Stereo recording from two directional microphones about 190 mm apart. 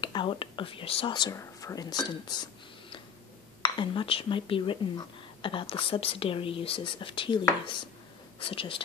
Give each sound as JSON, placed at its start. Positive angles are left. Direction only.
{"t": 0.0, "sound": "speech", "side_deg": 25}
{"t": 3.6, "sound": "speech", "side_deg": 25}